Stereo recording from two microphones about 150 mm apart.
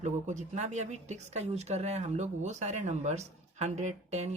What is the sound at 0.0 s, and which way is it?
A woman's voice, 55° right (ahead or behind).